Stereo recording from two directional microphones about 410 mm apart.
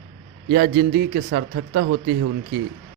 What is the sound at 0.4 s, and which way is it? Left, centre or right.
Speech, right.